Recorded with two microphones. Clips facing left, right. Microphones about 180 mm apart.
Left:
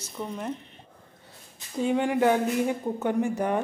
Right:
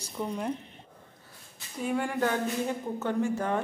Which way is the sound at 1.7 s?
25° left (ahead or behind).